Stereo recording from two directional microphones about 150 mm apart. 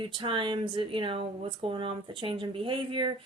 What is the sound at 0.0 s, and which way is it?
Speech, 35° right (ahead or behind).